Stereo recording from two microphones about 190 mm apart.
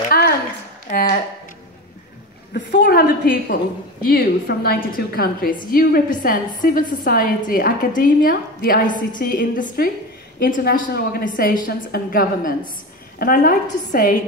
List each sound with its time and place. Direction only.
0.1 s a sound: 50° left (ahead or behind)
0.8 s speech: 45° left (ahead or behind)
2.5 s a woman's voice: 60° left (ahead or behind)